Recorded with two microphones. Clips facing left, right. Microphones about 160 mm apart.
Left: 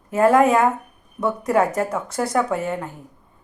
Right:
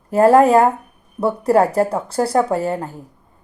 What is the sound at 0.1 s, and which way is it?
A woman's voice, 35° right (ahead or behind).